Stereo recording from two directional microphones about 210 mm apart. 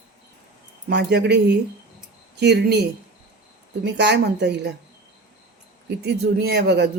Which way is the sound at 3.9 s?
55° right (ahead or behind).